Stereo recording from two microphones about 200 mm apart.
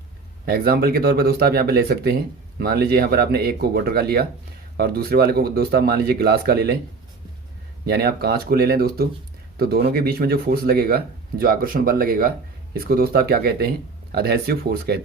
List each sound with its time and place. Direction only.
0.4 s speech: 50° right (ahead or behind)
7.9 s speech: 50° right (ahead or behind)